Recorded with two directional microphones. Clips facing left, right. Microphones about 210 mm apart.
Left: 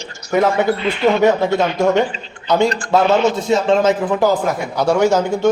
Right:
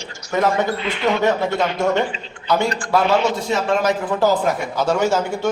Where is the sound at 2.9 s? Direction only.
20° left (ahead or behind).